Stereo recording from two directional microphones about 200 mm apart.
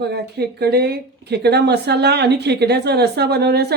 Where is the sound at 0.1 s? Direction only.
55° right (ahead or behind).